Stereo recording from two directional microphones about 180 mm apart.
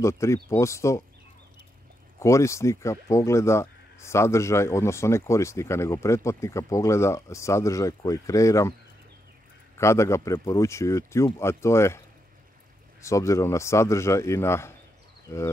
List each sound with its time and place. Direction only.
0.0 s speech: 15° left (ahead or behind)
2.1 s speech: 15° left (ahead or behind)
9.8 s speech: 15° left (ahead or behind)
13.0 s speech: 15° left (ahead or behind)